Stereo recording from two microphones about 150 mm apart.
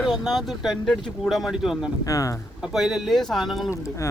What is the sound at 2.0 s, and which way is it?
Speech, 20° left (ahead or behind).